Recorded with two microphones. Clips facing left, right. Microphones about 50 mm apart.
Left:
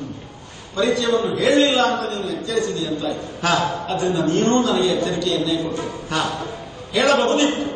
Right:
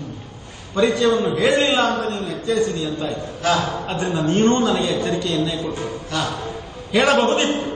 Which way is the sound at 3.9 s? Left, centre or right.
Right.